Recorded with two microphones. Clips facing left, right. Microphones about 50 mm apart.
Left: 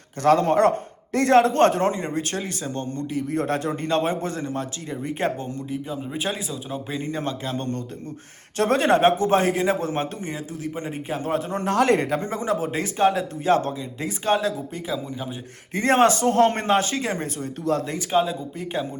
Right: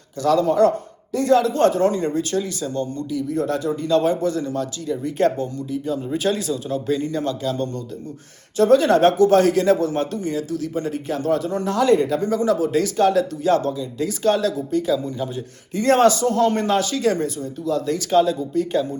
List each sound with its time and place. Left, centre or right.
0.2 s a man's voice: left
1.9 s a man's voice: left
5.8 s a man's voice: centre; by 8.9 s left
8.9 s a man's voice: left
15.7 s speech: left
17.2 s a man's voice: left
17.8 s a man's voice: centre